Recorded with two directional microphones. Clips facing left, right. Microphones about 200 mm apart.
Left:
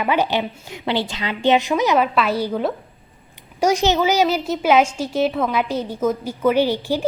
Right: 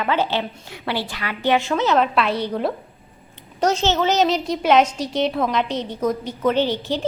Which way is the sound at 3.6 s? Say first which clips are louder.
Left 2 dB; 15° left (ahead or behind).